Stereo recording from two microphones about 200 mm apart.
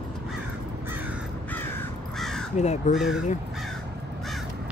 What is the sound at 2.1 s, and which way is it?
Crow, centre (ahead or behind).